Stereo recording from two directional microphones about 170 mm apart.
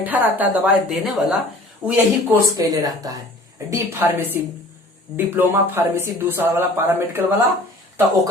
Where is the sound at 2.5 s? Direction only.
20° right (ahead or behind).